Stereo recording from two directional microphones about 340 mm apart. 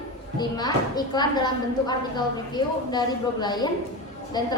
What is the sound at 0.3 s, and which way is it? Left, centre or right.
A woman's voice, centre.